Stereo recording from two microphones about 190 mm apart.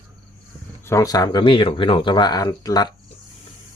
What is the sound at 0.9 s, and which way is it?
Speech, 15° left (ahead or behind).